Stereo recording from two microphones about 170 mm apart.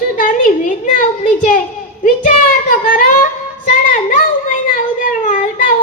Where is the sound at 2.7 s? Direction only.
55° left (ahead or behind).